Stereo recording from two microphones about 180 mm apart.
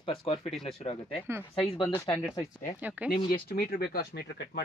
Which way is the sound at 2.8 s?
10° right (ahead or behind).